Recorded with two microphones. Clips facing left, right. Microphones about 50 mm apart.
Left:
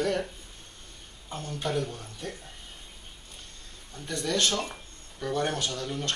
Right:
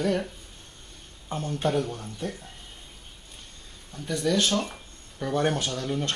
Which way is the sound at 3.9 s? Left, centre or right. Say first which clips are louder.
Right 4 dB; centre.